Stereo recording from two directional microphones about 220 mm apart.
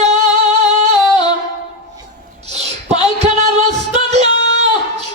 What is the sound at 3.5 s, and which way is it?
Music, 30° right (ahead or behind).